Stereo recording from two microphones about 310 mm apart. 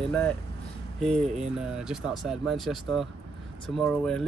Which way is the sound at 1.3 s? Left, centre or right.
Centre.